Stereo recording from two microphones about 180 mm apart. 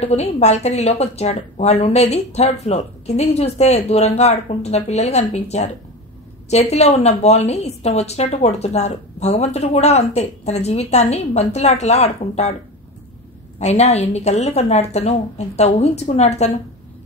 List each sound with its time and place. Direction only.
0.0 s a woman's voice: 35° left (ahead or behind)
13.6 s a woman's voice: 40° left (ahead or behind)